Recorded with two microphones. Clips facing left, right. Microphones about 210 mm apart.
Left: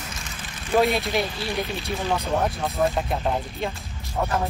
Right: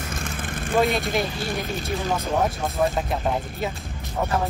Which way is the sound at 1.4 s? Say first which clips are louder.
Even; 50° right (ahead or behind).